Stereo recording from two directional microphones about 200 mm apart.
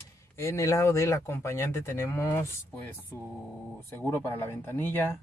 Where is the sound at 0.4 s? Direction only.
15° left (ahead or behind).